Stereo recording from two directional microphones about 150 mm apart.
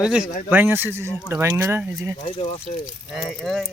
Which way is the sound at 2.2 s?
45° left (ahead or behind).